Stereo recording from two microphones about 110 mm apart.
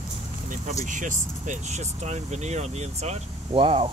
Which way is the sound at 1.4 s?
90° right.